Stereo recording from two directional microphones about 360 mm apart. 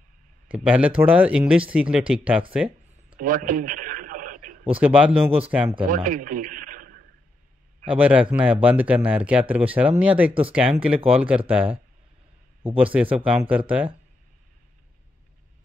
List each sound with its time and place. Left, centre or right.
0.5 s speech: centre
2.5 s a sound: centre
3.2 s radio: right
4.7 s speech: centre
5.9 s a man's voice: right
7.9 s speech: centre
12.7 s speech: centre